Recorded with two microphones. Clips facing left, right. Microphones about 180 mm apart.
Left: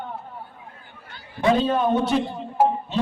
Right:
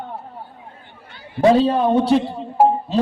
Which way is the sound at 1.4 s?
35° right (ahead or behind).